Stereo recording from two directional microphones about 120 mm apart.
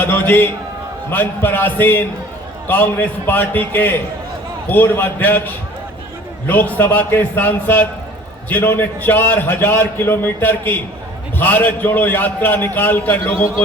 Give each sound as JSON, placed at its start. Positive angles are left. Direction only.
{"t": 0.0, "sound": "a man's voice", "side_deg": 15}
{"t": 6.5, "sound": "a man's voice", "side_deg": 15}